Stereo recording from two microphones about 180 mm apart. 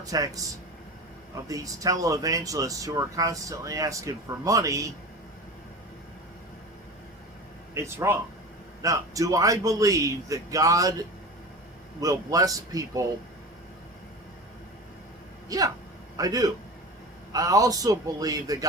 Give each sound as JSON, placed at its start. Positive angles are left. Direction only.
{"t": 0.0, "sound": "speech", "side_deg": -20}
{"t": 1.5, "sound": "speech", "side_deg": -20}
{"t": 7.7, "sound": "speech", "side_deg": -15}
{"t": 15.4, "sound": "speech", "side_deg": -20}